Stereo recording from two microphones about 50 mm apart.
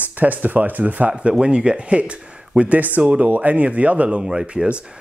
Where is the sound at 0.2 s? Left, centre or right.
Right.